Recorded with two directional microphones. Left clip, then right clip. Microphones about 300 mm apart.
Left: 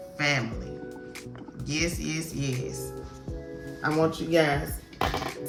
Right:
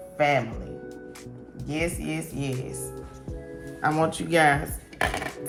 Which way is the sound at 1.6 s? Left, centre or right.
Centre.